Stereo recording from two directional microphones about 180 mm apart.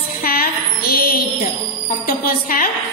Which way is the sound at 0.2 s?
55° left (ahead or behind).